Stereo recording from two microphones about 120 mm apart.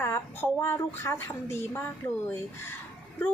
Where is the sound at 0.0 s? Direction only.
20° left (ahead or behind).